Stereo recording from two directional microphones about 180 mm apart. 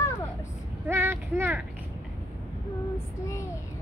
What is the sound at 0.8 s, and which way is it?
Speech, 10° right (ahead or behind).